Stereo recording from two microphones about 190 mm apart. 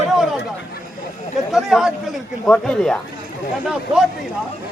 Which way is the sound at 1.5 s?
Centre (ahead or behind).